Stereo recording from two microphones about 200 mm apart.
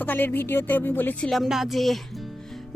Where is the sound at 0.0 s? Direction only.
10° left (ahead or behind).